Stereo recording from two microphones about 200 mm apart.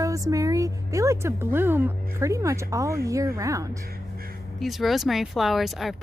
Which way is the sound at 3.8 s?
50° right (ahead or behind).